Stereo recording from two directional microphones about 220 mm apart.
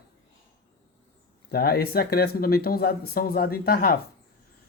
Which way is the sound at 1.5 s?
45° left (ahead or behind).